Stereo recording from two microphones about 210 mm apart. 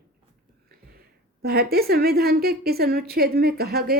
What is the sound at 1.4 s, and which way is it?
A woman's voice, 45° right (ahead or behind).